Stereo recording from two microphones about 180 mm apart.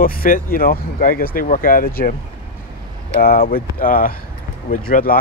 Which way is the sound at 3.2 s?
55° left (ahead or behind).